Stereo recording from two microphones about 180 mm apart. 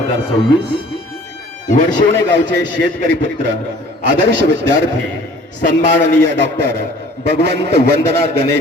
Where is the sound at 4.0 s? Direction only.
70° right (ahead or behind).